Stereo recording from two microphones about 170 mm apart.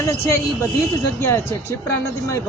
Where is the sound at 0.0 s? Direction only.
20° left (ahead or behind).